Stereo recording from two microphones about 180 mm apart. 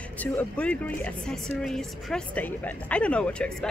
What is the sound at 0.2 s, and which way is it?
A woman's voice, 10° left (ahead or behind).